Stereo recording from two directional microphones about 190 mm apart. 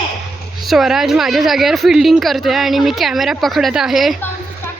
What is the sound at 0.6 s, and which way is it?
A woman's voice, centre (ahead or behind).